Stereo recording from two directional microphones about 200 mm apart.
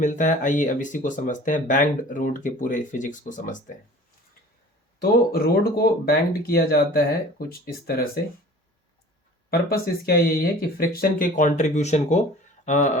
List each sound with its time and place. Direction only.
0.0 s speech: 40° left (ahead or behind)
4.9 s speech: 50° left (ahead or behind)
9.5 s speech: 50° left (ahead or behind)